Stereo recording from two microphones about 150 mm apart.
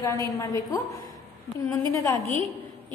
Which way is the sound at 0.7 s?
20° left (ahead or behind).